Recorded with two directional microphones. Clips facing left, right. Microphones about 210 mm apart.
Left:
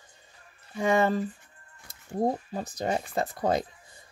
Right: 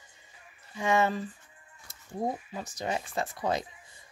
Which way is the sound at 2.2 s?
35° left (ahead or behind).